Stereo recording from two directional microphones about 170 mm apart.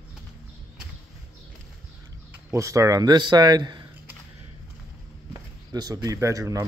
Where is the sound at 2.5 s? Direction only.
20° right (ahead or behind).